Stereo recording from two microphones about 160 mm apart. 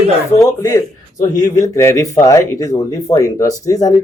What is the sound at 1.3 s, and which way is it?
Speech, 25° left (ahead or behind).